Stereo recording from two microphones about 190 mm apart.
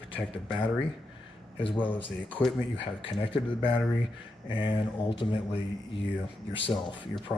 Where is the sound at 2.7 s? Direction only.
25° left (ahead or behind).